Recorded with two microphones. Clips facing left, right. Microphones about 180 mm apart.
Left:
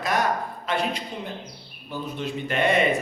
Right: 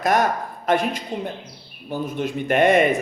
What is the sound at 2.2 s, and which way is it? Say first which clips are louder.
Speech: right 7 dB; 50° right (ahead or behind).